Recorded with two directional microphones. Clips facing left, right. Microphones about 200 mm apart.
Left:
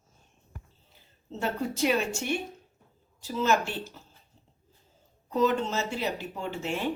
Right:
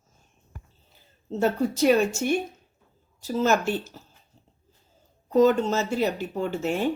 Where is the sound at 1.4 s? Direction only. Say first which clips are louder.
Right 6 dB; 45° right (ahead or behind).